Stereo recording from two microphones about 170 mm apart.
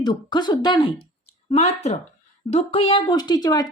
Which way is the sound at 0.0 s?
25° left (ahead or behind).